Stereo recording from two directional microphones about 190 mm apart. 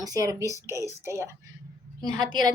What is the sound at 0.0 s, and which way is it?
A woman's voice, 20° right (ahead or behind).